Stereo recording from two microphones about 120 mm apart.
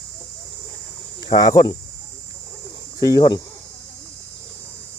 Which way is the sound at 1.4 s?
40° left (ahead or behind).